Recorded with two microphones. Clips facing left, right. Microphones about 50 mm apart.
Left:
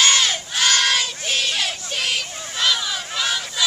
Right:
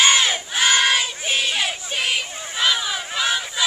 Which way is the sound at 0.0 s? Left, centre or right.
Centre.